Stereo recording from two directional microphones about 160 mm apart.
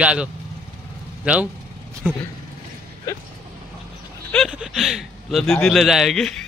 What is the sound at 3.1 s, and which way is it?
Vehicle, 20° left (ahead or behind).